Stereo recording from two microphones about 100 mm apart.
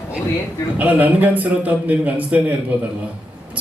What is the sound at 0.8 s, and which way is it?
A man's voice, 15° right (ahead or behind).